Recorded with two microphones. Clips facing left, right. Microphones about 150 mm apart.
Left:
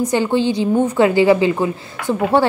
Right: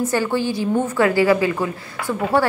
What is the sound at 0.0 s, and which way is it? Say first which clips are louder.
A woman's voice: left 4 dB; 20° left (ahead or behind).